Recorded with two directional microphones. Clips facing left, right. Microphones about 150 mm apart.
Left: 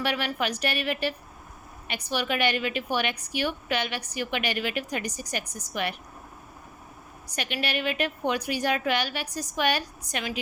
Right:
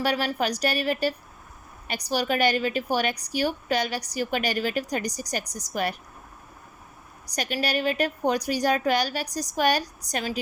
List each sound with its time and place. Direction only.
0.0 s a woman's voice: 35° right (ahead or behind)
7.3 s a woman's voice: 40° right (ahead or behind)